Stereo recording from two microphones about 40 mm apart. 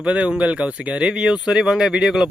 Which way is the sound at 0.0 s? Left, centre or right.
Right.